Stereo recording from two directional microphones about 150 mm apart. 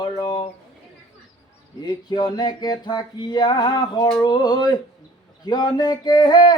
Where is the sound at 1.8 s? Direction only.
30° left (ahead or behind).